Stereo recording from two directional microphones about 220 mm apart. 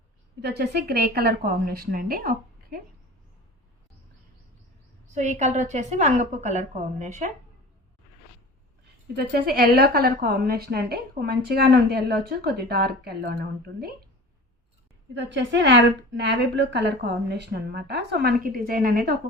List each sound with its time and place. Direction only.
0.4 s a woman's voice: 50° right (ahead or behind)
5.1 s a woman's voice: 30° right (ahead or behind)
9.1 s a woman's voice: 45° right (ahead or behind)
15.1 s a woman's voice: 55° right (ahead or behind)